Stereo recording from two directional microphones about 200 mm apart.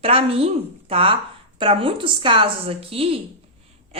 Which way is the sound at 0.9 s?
25° right (ahead or behind).